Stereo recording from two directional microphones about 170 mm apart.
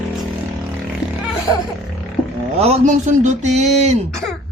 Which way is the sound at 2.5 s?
40° right (ahead or behind).